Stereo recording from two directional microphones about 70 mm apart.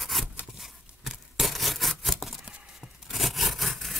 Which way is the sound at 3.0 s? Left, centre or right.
Centre.